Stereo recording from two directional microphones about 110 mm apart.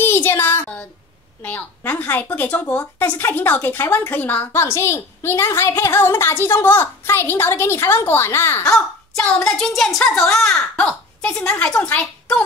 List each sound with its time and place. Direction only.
0.0 s a sound: 20° left (ahead or behind)
1.4 s a woman's voice: 20° left (ahead or behind)
8.6 s a woman's voice: 10° left (ahead or behind)